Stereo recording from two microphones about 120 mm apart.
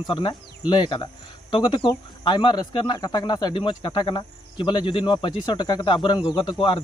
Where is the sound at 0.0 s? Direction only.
40° left (ahead or behind).